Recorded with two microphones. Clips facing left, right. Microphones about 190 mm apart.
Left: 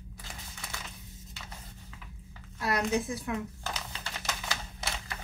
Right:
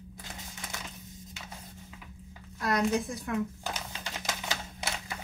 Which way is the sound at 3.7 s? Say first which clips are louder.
Right 1 dB; 15° right (ahead or behind).